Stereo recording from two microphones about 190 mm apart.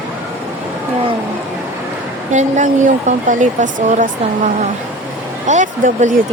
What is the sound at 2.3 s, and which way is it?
Speech, 40° right (ahead or behind).